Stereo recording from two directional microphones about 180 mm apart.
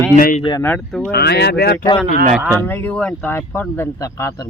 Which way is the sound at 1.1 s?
65° left (ahead or behind).